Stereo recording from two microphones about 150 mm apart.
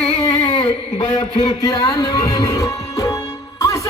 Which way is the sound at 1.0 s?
30° left (ahead or behind).